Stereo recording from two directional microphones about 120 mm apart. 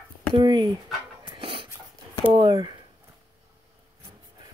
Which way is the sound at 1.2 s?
45° right (ahead or behind).